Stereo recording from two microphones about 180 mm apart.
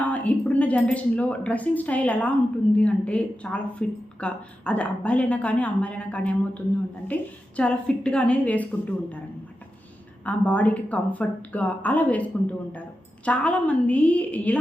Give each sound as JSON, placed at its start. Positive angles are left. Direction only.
{"t": 0.0, "sound": "a woman's voice", "side_deg": 10}
{"t": 10.2, "sound": "a woman's voice", "side_deg": 10}